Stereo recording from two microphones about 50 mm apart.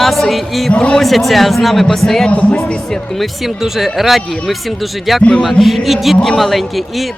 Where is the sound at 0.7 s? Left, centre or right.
Left.